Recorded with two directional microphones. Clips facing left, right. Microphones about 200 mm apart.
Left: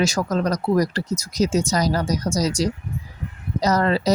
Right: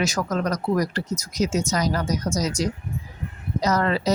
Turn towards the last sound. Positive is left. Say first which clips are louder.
# left 2 dB
turn(degrees=35)  # may be behind; listen again after turning